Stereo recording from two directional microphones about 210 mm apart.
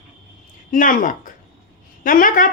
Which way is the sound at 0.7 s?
40° left (ahead or behind).